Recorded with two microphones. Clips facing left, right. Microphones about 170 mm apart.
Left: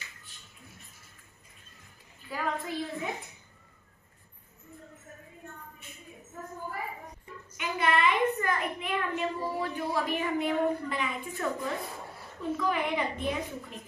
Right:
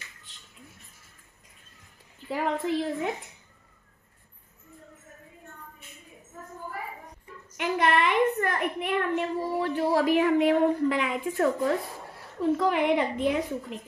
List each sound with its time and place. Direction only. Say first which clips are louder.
2.6 s a woman's voice: right 7 dB; 80° right
7.5 s a woman's voice: right 4 dB; 70° right (ahead or behind)